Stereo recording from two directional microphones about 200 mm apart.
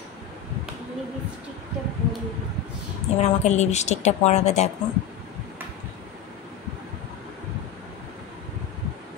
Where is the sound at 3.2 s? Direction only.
35° left (ahead or behind).